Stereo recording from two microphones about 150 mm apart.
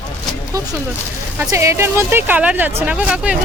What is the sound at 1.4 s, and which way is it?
Speech, 20° right (ahead or behind).